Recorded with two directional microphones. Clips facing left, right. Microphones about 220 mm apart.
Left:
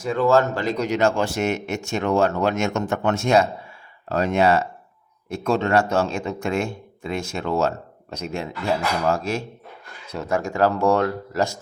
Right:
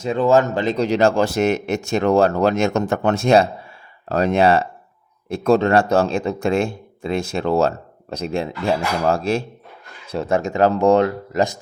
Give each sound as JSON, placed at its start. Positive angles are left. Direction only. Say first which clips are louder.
{"t": 0.0, "sound": "speech", "louder": "right 2 dB", "side_deg": -20}